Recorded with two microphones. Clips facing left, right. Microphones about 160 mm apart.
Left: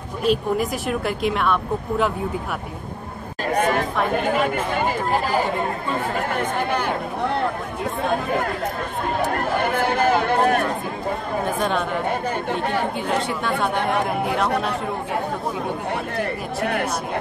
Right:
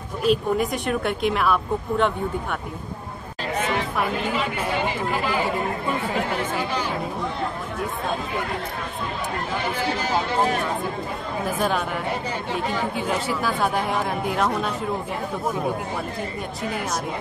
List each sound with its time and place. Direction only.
0.2 s speech: centre (ahead or behind)
3.5 s speech: 45° left (ahead or behind)
5.9 s chatter: 50° left (ahead or behind)
11.4 s speech: 5° right (ahead or behind)
13.1 s speech: 5° right (ahead or behind)
16.2 s speech: 65° left (ahead or behind)